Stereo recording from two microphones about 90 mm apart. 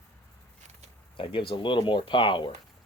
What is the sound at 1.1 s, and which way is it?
Speech, 70° left (ahead or behind).